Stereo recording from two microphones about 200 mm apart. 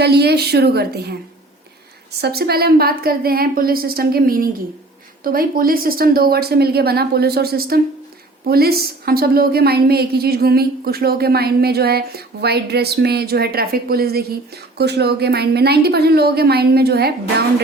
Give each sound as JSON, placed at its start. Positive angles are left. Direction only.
{"t": 0.0, "sound": "a woman's voice", "side_deg": -55}
{"t": 2.2, "sound": "a woman's voice", "side_deg": -50}